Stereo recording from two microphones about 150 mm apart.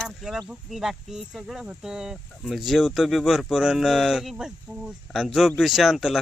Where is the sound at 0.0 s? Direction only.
Centre (ahead or behind).